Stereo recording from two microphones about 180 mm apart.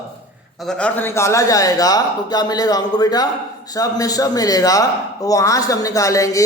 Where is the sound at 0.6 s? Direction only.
5° left (ahead or behind).